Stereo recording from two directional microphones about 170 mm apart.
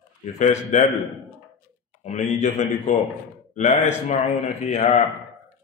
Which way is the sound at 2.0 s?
40° left (ahead or behind).